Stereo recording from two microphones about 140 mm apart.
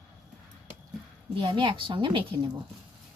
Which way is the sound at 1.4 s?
35° right (ahead or behind).